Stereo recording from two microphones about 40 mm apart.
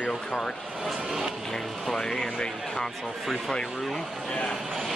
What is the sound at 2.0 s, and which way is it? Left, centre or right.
Speech, centre.